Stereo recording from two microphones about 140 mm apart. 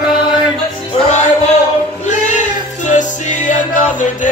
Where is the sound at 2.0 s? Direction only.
60° left (ahead or behind).